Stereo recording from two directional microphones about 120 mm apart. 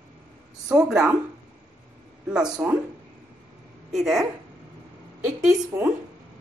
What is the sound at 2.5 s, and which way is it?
Speech, 5° right (ahead or behind).